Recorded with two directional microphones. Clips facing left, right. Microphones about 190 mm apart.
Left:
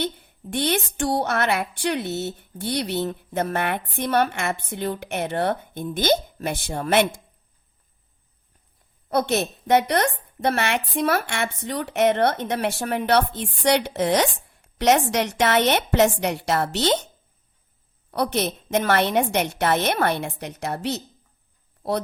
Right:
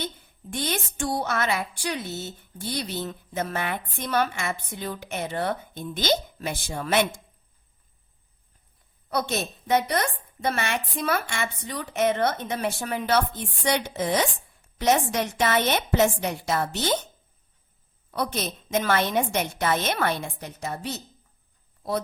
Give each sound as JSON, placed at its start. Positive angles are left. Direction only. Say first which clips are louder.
{"t": 0.5, "sound": "a woman's voice", "louder": "left 6 dB", "side_deg": 65}
{"t": 9.0, "sound": "a woman's voice", "louder": "left 5 dB", "side_deg": 55}
{"t": 18.1, "sound": "a woman's voice", "louder": "left 5 dB", "side_deg": 65}